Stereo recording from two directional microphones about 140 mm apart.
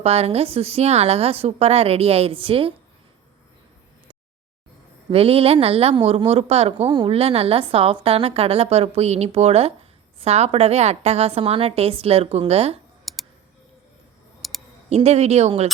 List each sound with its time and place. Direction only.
0.0 s speech: 45° right (ahead or behind)
5.1 s speech: 45° right (ahead or behind)
13.1 s clicking: centre (ahead or behind)
14.4 s computer keyboard: centre (ahead or behind)
14.8 s speech: 50° right (ahead or behind)